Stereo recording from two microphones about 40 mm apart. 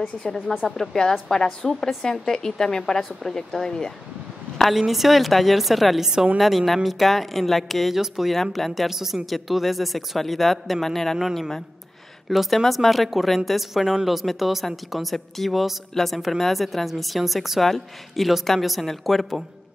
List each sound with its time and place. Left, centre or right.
0.2 s speech: centre
4.7 s a woman's voice: centre
7.9 s speech: centre
8.4 s a woman's voice: centre
12.3 s a woman's voice: centre